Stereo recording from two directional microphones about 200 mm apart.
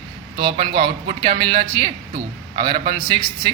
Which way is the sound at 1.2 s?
25° right (ahead or behind).